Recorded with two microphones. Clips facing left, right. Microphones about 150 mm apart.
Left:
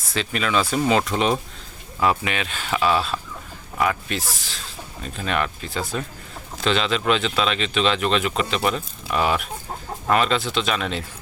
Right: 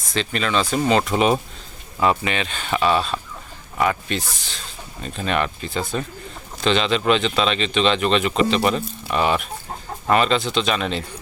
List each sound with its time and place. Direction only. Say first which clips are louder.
0.1 s speech: right 1 dB; 5° left (ahead or behind)